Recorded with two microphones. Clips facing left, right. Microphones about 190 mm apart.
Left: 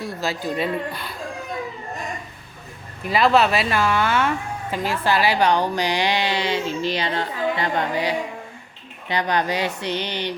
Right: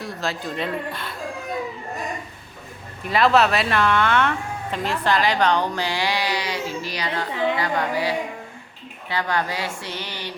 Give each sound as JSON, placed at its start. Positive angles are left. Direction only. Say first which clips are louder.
{"t": 0.0, "sound": "speech", "louder": "left 2 dB", "side_deg": 0}
{"t": 3.1, "sound": "speech", "louder": "even", "side_deg": 0}
{"t": 7.6, "sound": "music", "louder": "left 1 dB", "side_deg": 20}
{"t": 9.0, "sound": "speech", "louder": "left 3 dB", "side_deg": 20}